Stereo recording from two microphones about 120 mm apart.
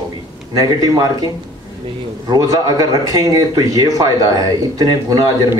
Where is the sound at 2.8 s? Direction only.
30° right (ahead or behind).